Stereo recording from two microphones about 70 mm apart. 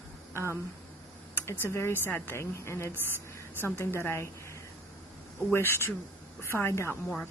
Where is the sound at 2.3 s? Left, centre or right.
Left.